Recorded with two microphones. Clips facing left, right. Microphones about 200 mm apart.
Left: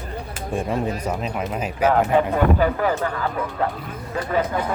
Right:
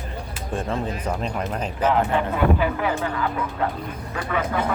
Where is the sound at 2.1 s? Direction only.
40° left (ahead or behind).